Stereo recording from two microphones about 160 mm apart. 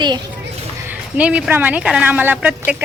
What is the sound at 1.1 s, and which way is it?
Speech, 10° right (ahead or behind).